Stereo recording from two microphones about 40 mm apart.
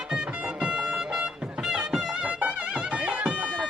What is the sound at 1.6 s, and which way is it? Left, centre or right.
Music, centre.